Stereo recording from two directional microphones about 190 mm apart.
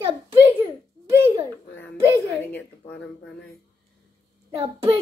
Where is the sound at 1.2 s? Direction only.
15° right (ahead or behind).